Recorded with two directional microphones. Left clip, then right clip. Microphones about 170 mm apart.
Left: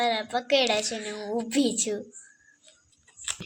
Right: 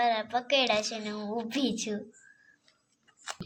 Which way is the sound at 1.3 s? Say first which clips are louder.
Left 6 dB; 45° left (ahead or behind).